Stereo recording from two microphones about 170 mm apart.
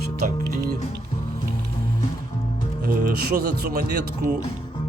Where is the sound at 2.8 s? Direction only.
60° right (ahead or behind).